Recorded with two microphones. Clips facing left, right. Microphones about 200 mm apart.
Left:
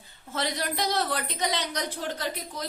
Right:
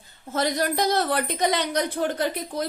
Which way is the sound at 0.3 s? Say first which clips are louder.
Right 6 dB; 45° right (ahead or behind).